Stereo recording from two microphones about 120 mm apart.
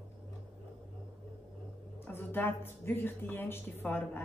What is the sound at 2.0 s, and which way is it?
Speech, 15° left (ahead or behind).